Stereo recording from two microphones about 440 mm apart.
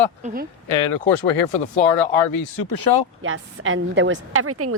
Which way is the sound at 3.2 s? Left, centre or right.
Right.